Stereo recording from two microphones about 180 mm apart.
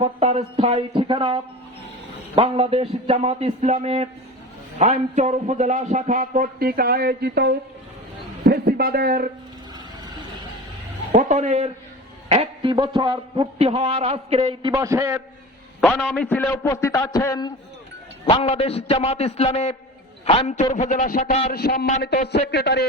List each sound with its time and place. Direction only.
0.0 s a man's voice: 35° right (ahead or behind); by 9.3 s 55° right (ahead or behind)
11.1 s a man's voice: 40° right (ahead or behind); by 15.2 s 15° right (ahead or behind)
15.8 s a man's voice: 5° left (ahead or behind); by 17.5 s 20° left (ahead or behind)
18.3 s a man's voice: 30° left (ahead or behind)
21.5 s a man's voice: 60° left (ahead or behind)